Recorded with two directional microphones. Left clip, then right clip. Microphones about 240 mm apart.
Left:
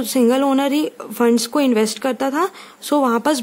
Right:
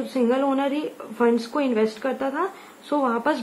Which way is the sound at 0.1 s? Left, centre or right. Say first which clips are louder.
Left 6 dB; left.